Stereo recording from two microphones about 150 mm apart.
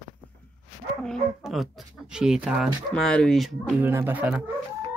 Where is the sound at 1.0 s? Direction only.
Centre (ahead or behind).